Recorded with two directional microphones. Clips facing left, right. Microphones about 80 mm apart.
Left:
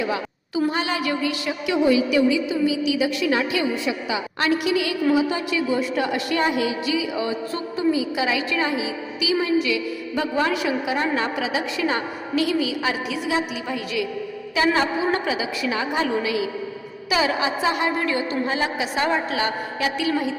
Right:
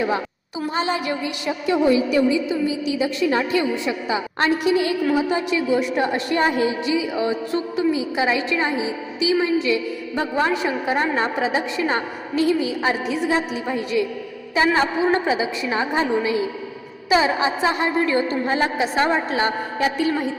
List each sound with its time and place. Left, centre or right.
0.7 s a woman's voice: right